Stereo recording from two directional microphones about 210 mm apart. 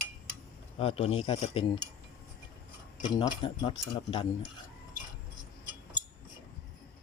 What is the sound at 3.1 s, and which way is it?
Speech, 20° left (ahead or behind).